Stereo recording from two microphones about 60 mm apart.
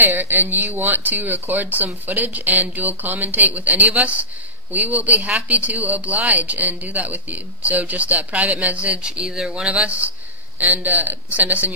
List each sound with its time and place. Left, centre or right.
0.0 s speech: right
9.2 s speech: centre
9.7 s speech: right